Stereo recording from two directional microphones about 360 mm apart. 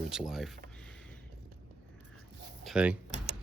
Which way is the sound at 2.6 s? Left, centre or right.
Centre.